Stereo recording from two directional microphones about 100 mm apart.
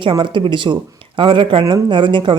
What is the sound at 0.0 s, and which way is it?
Speech, 55° right (ahead or behind).